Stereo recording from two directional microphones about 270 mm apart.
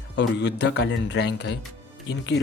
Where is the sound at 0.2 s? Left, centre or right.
Left.